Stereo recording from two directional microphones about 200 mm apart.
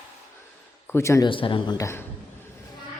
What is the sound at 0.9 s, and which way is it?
Speech, 15° left (ahead or behind).